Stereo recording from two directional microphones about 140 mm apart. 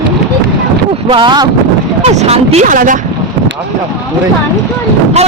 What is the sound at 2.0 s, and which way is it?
Speech, 50° right (ahead or behind).